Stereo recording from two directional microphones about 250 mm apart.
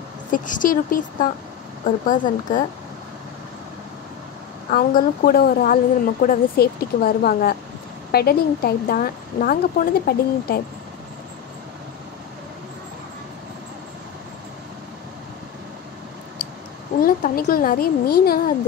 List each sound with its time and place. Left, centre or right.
0.3 s speech: left
4.6 s speech: left
17.0 s speech: left